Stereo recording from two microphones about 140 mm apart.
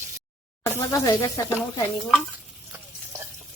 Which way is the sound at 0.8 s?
25° left (ahead or behind).